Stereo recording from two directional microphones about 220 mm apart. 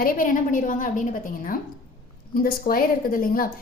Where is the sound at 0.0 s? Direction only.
40° left (ahead or behind).